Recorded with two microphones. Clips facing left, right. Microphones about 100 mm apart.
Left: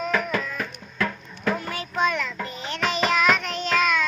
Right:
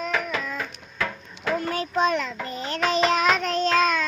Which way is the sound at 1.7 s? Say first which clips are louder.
Right 2 dB; 35° right (ahead or behind).